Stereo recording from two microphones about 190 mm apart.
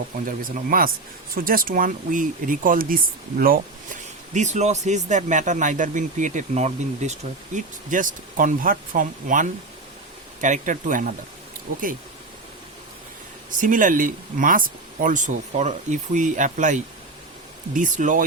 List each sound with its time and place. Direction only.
0.3 s speech: 45° right (ahead or behind)
4.4 s speech: 40° right (ahead or behind)
13.6 s speech: 45° right (ahead or behind)